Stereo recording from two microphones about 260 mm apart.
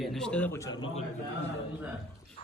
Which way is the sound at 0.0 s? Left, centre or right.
Centre.